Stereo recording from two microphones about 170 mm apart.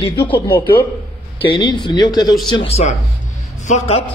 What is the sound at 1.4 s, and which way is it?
A man's voice, 30° left (ahead or behind).